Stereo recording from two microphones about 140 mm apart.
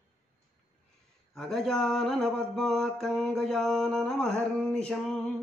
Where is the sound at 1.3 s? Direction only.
5° left (ahead or behind).